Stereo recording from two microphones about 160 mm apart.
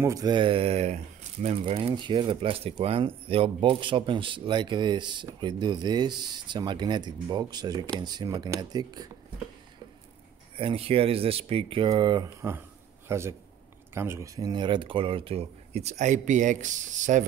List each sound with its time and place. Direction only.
0.0 s speech: 20° right (ahead or behind)
10.6 s speech: 35° right (ahead or behind)
12.4 s a man's voice: 15° right (ahead or behind); by 17.3 s 50° right (ahead or behind)